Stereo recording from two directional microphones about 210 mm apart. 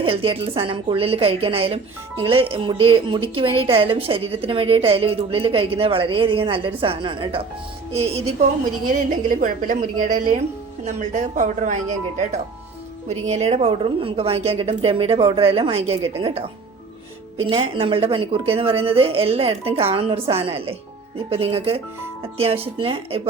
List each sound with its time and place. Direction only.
0.0 s a woman's voice: 25° right (ahead or behind)
8.9 s a woman's voice: 40° right (ahead or behind)
13.2 s a woman's voice: 30° right (ahead or behind)